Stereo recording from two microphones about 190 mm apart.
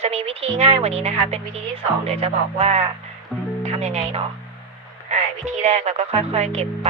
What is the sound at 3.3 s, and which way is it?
Music, centre (ahead or behind).